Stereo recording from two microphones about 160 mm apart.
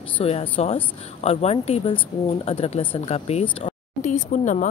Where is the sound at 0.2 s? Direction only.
40° left (ahead or behind).